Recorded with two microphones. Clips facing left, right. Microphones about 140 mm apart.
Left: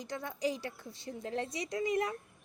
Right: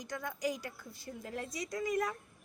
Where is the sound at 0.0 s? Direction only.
30° left (ahead or behind).